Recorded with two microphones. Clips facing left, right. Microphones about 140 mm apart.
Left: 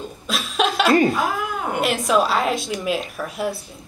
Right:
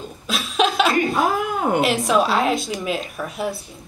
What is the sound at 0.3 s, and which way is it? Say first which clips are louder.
Chuckle: right 2 dB; centre (ahead or behind).